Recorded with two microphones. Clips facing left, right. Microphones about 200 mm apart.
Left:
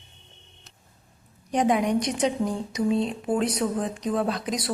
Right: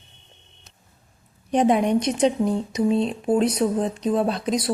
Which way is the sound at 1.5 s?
25° right (ahead or behind).